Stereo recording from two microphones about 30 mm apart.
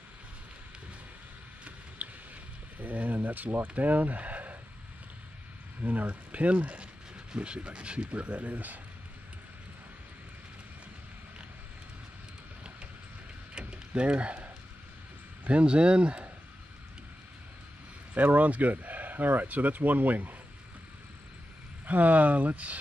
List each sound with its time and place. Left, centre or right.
2.0 s a sound: right
2.8 s speech: right
3.6 s speech: right
5.8 s speech: right
13.6 s a sound: right
15.6 s speech: right
18.1 s speech: right
21.8 s speech: right